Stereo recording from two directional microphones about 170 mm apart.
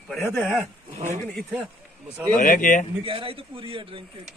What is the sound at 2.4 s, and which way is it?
Speech, 50° left (ahead or behind).